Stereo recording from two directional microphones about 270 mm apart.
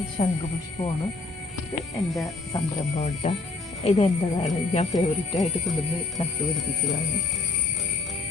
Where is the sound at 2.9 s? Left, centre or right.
Left.